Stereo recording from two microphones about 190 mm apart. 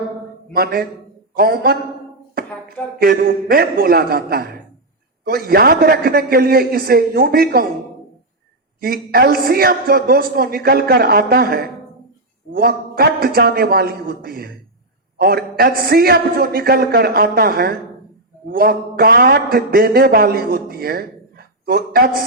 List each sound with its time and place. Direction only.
0.5 s a man's voice: 55° right (ahead or behind)
3.0 s a man's voice: 50° right (ahead or behind)
8.8 s a man's voice: 55° right (ahead or behind)